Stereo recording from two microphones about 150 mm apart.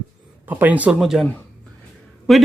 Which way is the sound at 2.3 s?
Centre (ahead or behind).